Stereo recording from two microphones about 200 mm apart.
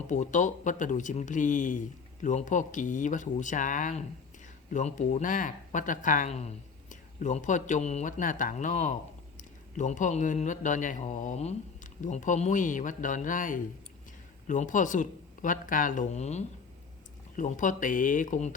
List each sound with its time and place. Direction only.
0.1 s a man's voice: 40° left (ahead or behind)